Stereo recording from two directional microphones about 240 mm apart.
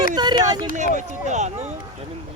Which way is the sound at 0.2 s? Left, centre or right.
Centre.